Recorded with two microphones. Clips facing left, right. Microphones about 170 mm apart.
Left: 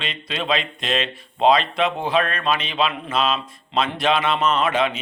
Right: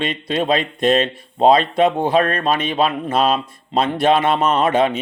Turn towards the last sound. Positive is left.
turn(degrees=-45)  # may be behind; listen again after turning